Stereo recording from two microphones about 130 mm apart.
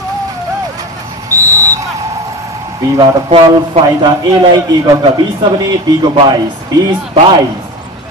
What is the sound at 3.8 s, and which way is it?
Speech, 35° right (ahead or behind).